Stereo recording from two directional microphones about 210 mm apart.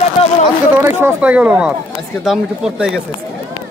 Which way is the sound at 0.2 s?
30° left (ahead or behind).